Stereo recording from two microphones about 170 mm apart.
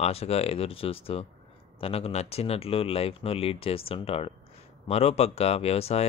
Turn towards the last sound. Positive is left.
turn(degrees=35)  # may be behind; listen again after turning